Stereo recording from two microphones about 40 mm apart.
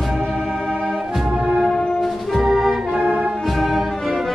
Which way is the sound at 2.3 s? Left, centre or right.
Centre.